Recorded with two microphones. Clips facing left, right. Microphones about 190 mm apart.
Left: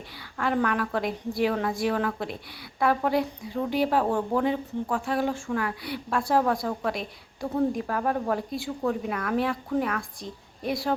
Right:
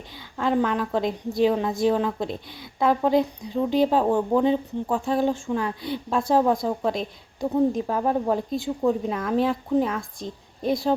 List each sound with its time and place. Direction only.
0.3 s speech: 20° right (ahead or behind)